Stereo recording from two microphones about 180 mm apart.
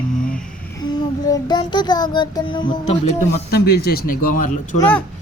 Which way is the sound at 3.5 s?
65° left (ahead or behind).